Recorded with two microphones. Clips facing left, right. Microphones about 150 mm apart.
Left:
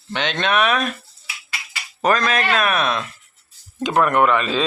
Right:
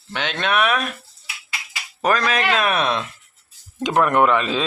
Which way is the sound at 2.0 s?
10° right (ahead or behind).